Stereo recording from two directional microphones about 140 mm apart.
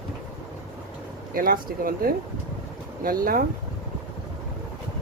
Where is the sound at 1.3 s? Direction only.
90° right.